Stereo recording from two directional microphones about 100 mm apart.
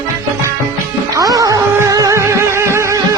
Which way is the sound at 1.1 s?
35° right (ahead or behind).